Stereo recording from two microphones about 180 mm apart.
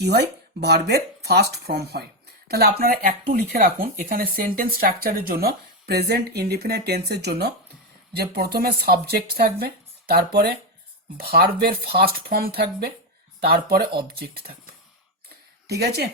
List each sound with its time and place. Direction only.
0.0 s speech: 65° right (ahead or behind)
15.8 s speech: 65° right (ahead or behind)